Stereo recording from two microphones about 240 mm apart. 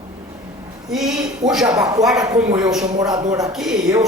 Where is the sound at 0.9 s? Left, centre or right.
Centre.